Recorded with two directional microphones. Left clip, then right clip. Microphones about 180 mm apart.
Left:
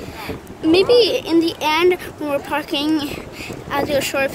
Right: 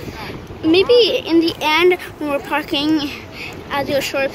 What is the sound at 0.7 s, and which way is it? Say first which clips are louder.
Speech: right 1 dB; 10° left (ahead or behind).